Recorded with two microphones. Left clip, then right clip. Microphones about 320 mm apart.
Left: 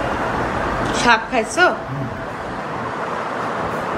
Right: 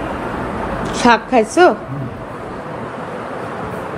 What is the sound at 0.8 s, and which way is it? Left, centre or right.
Speech, centre.